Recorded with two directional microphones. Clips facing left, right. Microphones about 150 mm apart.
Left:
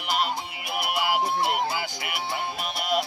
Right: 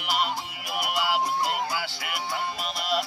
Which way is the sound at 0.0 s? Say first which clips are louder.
Left 1 dB; centre (ahead or behind).